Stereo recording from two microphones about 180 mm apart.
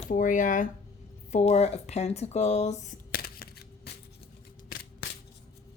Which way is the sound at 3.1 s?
60° left (ahead or behind).